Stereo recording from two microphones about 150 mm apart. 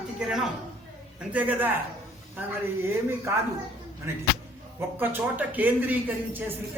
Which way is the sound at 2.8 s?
15° right (ahead or behind).